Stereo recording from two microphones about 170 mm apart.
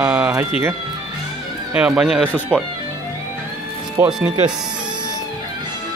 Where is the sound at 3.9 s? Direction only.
10° right (ahead or behind).